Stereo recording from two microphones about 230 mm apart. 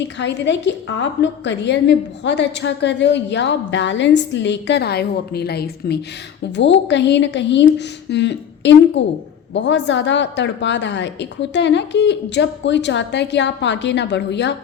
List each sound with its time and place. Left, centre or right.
0.0 s a woman's voice: left